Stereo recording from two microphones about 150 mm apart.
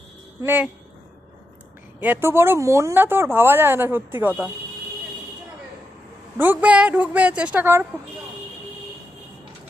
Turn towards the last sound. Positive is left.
turn(degrees=-15)  # may be behind; listen again after turning